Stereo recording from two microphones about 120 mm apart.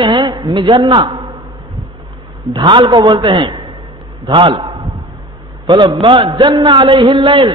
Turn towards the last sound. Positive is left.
turn(degrees=-45)  # may be behind; listen again after turning